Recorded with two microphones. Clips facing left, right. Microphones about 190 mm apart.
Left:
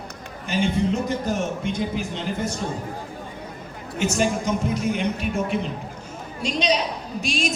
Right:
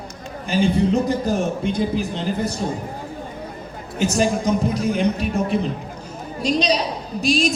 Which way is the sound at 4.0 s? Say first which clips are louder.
Right 3 dB; 35° right (ahead or behind).